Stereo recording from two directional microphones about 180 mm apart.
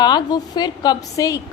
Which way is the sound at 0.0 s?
25° left (ahead or behind).